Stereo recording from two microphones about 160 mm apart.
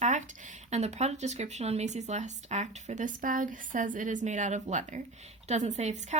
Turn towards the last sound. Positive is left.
turn(degrees=-45)  # may be behind; listen again after turning